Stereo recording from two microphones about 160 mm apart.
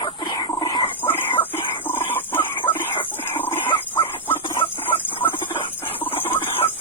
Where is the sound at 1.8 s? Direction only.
10° left (ahead or behind).